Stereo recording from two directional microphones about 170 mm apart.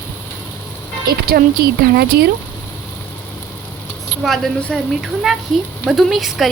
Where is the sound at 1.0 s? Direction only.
60° right (ahead or behind).